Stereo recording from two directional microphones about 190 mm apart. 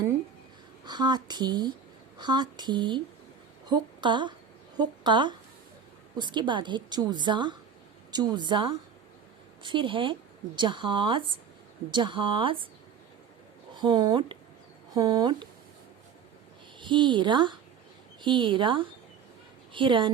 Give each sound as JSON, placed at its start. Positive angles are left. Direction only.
{"t": 0.9, "sound": "a woman's voice", "side_deg": -20}
{"t": 13.7, "sound": "speech", "side_deg": -20}
{"t": 16.8, "sound": "speech", "side_deg": -25}